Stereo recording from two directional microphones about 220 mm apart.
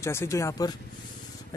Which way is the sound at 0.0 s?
10° left (ahead or behind).